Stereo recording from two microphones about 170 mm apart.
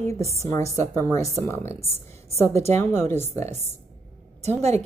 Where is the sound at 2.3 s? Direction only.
40° right (ahead or behind).